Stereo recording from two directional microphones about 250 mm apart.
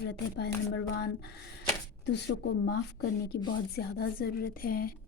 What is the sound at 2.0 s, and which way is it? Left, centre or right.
Speech, left.